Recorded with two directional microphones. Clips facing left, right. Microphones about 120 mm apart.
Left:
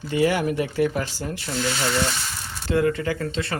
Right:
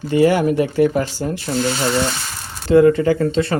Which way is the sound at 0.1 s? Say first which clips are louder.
Right 7 dB; 45° right (ahead or behind).